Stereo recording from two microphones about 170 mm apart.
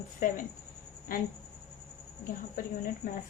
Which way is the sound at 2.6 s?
55° left (ahead or behind).